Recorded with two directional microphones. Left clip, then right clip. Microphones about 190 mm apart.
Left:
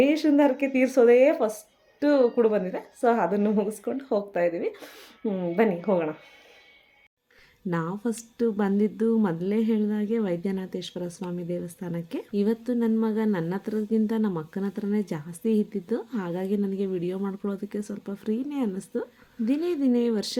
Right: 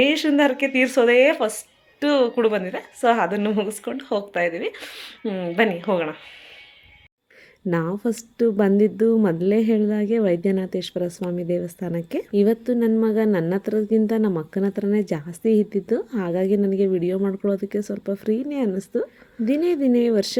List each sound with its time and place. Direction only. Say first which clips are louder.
0.0 s speech: right 3 dB; centre (ahead or behind)
7.7 s a woman's voice: right 6 dB; 15° right (ahead or behind)